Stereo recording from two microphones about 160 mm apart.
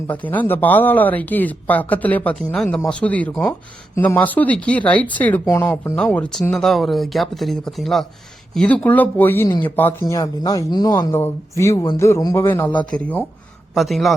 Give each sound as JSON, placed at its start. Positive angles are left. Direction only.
{"t": 0.1, "sound": "speech", "side_deg": 10}
{"t": 13.7, "sound": "a man's voice", "side_deg": 0}